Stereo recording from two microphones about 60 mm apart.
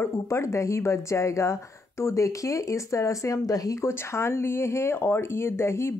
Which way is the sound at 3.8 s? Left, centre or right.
Left.